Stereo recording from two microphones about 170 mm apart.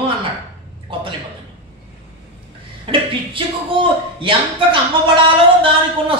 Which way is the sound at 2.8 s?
30° right (ahead or behind).